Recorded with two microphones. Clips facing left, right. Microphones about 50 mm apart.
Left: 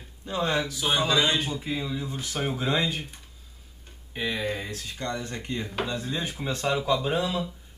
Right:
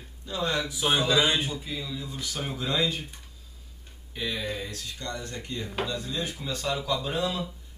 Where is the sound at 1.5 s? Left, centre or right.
Left.